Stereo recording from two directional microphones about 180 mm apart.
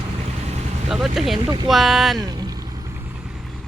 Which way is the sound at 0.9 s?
Centre (ahead or behind).